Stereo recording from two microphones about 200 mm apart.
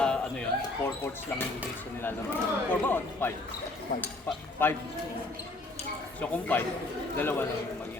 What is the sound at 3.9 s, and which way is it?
Speech, 45° left (ahead or behind).